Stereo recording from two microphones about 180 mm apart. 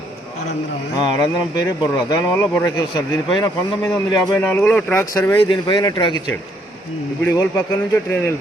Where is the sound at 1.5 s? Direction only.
20° left (ahead or behind).